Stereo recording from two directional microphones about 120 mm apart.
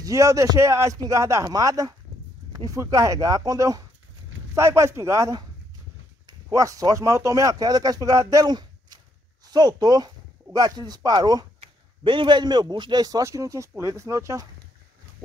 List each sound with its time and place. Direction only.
0.0 s a man's voice: 25° right (ahead or behind)